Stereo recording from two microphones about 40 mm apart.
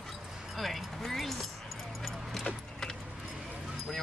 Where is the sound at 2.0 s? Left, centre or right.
Centre.